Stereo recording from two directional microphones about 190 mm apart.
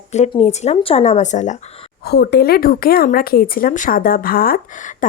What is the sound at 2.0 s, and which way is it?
Speech, 60° left (ahead or behind).